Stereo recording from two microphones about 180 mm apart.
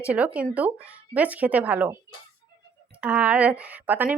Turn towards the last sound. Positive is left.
turn(degrees=-10)  # may be behind; listen again after turning